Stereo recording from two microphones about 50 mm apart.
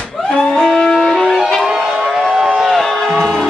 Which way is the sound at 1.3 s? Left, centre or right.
Centre.